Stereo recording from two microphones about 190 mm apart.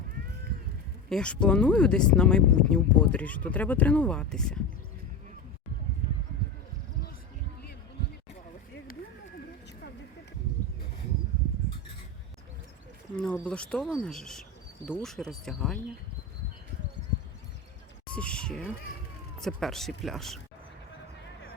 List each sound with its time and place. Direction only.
1.1 s speech: 5° left (ahead or behind)
13.2 s speech: 5° left (ahead or behind)
18.1 s a sound: 5° left (ahead or behind)
19.4 s speech: centre (ahead or behind)